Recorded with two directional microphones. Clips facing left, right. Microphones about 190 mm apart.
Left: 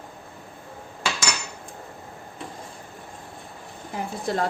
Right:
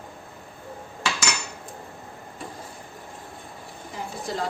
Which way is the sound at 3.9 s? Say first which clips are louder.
Left 4 dB; 60° left (ahead or behind).